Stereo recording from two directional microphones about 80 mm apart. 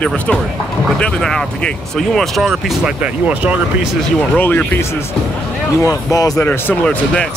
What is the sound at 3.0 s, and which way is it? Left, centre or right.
Speech, centre.